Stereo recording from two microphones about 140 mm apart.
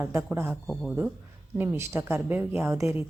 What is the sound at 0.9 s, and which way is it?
A woman's voice, 10° right (ahead or behind).